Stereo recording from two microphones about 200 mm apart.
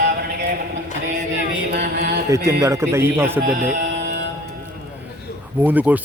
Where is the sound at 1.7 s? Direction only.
55° right (ahead or behind).